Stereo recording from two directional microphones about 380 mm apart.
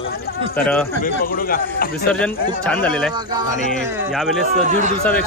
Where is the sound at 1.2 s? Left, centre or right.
Left.